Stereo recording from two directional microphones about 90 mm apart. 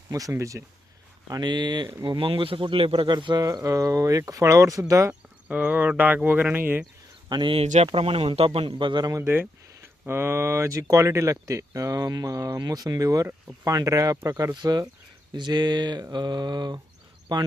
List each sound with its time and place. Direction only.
0.1 s speech: 35° right (ahead or behind)
1.3 s speech: 55° right (ahead or behind)
2.0 s speech: 70° right (ahead or behind)
3.4 s speech: 40° right (ahead or behind)
5.5 s speech: 20° right (ahead or behind)
7.3 s speech: 55° right (ahead or behind)
7.5 s speech: 90° right; by 9.0 s 60° right (ahead or behind)
9.2 s speech: 25° right (ahead or behind)
14.5 s mantra: 50° right (ahead or behind)
15.4 s speech: 55° right (ahead or behind)
16.1 s mantra: 50° right (ahead or behind)